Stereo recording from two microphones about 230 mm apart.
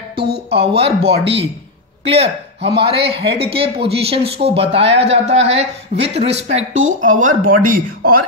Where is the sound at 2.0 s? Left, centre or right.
Right.